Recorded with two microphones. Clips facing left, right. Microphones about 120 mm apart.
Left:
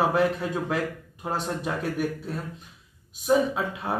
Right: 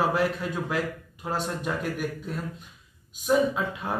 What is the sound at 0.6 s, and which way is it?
Speech, 20° left (ahead or behind).